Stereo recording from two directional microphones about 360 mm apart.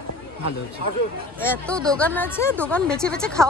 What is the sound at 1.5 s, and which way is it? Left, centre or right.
Speech, centre.